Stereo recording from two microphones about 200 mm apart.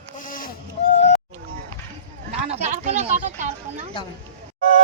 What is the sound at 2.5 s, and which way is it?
Speech, 35° right (ahead or behind).